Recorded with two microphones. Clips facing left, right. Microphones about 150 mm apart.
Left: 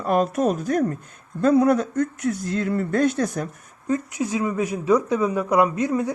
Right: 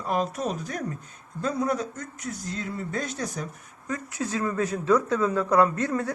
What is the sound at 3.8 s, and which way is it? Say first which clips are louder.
Speech: left 7 dB; 20° left (ahead or behind).